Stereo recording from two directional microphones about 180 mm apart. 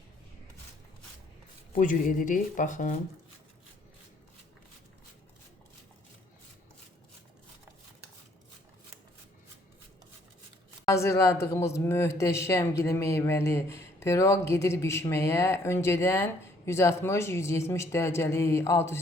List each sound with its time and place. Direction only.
1.8 s speech: 50° left (ahead or behind)
10.8 s speech: 15° left (ahead or behind)